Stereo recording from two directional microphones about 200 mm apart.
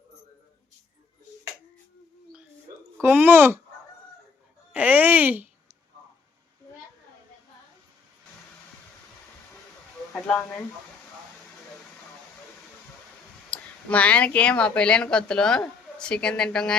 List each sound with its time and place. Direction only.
3.0 s speech: 10° right (ahead or behind)
4.7 s a sound: 5° right (ahead or behind)
13.5 s speech: 5° left (ahead or behind)